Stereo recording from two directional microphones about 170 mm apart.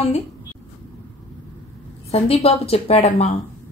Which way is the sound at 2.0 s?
35° left (ahead or behind).